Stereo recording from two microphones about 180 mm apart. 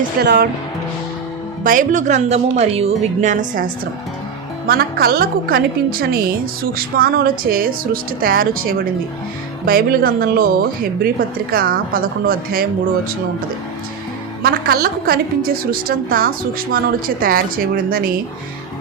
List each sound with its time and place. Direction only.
0.2 s speech: 70° right (ahead or behind)
1.6 s a woman's voice: 45° right (ahead or behind)
14.4 s a woman's voice: 55° right (ahead or behind)